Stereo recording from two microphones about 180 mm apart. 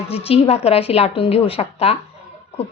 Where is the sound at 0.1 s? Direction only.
35° left (ahead or behind).